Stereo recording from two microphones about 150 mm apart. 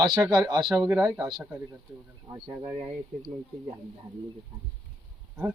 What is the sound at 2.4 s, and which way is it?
Speech, 30° right (ahead or behind).